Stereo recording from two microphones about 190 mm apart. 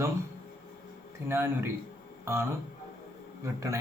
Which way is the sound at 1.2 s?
10° right (ahead or behind).